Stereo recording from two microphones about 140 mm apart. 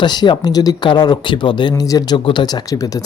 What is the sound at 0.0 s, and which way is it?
Speech, 30° left (ahead or behind).